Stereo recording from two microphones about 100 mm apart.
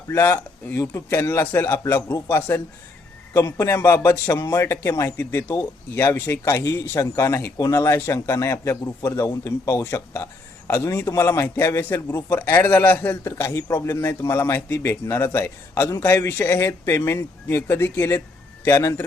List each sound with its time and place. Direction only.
0.1 s a man's voice: 20° left (ahead or behind)
6.0 s a man's voice: 25° left (ahead or behind)
9.8 s a man's voice: 25° left (ahead or behind)